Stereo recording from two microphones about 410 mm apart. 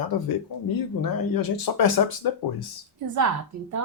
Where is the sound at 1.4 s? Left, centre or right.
Left.